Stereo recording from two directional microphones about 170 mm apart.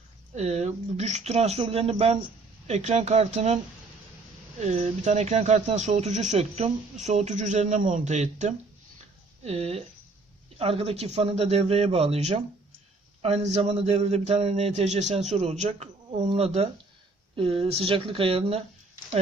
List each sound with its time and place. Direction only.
0.3 s speech: 40° right (ahead or behind)
4.6 s a man's voice: 40° right (ahead or behind)